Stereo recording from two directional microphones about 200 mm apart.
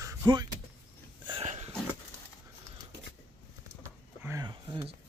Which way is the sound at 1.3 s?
30° right (ahead or behind).